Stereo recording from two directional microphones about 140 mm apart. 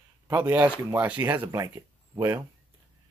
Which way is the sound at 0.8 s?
15° right (ahead or behind).